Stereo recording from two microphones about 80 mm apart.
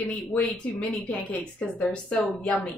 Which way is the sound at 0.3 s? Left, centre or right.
Centre.